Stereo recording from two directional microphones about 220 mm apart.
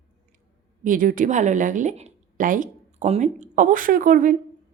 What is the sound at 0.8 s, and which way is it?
A woman's voice, 40° right (ahead or behind).